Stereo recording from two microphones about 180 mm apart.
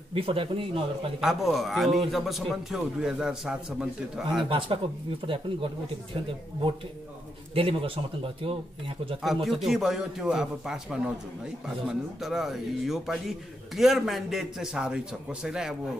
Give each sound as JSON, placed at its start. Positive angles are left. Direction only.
{"t": 0.1, "sound": "speech", "side_deg": -30}
{"t": 1.2, "sound": "a man's voice", "side_deg": 0}
{"t": 4.5, "sound": "speech", "side_deg": -30}
{"t": 7.5, "sound": "speech", "side_deg": -30}
{"t": 9.2, "sound": "a man's voice", "side_deg": 0}
{"t": 12.2, "sound": "a man's voice", "side_deg": 0}